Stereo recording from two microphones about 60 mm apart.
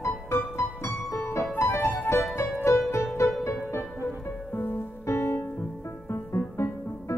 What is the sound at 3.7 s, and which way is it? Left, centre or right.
Music, left.